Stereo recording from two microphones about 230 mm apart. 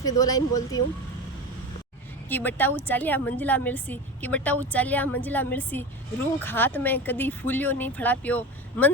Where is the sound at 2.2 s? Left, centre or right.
Centre.